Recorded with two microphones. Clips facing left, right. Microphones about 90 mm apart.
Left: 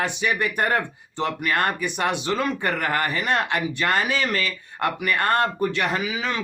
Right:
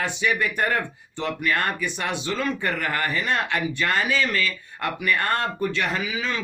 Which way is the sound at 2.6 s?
40° left (ahead or behind).